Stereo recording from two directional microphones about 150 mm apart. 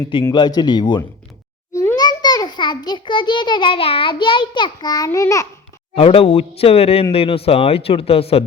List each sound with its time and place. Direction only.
0.3 s speech: 30° left (ahead or behind)
1.7 s a sound: 15° left (ahead or behind)
2.0 s a child's voice: 25° left (ahead or behind)
5.9 s speech: 40° left (ahead or behind)